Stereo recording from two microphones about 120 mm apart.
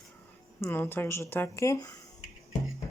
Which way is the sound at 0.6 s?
20° left (ahead or behind).